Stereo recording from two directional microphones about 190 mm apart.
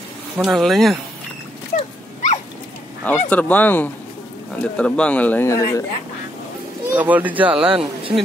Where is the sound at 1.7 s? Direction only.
40° left (ahead or behind).